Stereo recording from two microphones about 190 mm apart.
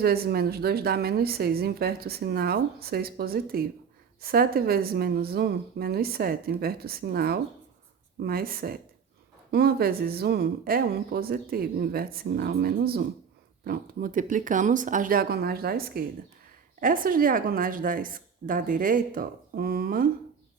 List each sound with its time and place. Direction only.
0.0 s a woman's voice: 55° right (ahead or behind)